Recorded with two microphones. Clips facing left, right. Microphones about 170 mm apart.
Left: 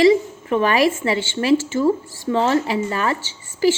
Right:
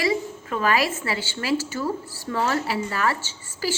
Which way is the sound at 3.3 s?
20° left (ahead or behind).